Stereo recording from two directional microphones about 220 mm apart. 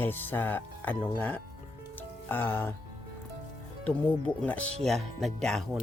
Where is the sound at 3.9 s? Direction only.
5° left (ahead or behind).